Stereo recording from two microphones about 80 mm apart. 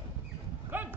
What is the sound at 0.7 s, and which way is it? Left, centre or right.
Dog, right.